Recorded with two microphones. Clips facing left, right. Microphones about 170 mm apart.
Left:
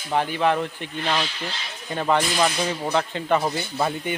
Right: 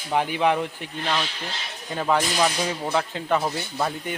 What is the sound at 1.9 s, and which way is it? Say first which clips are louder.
Speech: left 1 dB; centre (ahead or behind).